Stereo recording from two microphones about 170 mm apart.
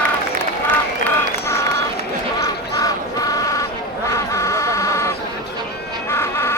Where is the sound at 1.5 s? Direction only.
15° left (ahead or behind).